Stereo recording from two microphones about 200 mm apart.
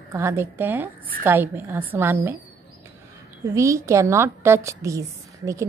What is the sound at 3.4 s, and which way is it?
A woman's voice, 15° right (ahead or behind).